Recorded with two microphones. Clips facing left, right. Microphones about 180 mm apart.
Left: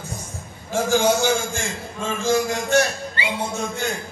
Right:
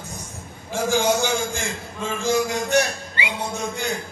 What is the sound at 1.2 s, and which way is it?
A man's voice, 15° right (ahead or behind).